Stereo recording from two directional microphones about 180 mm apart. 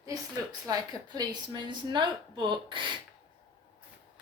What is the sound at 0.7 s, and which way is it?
A woman's voice, 20° right (ahead or behind).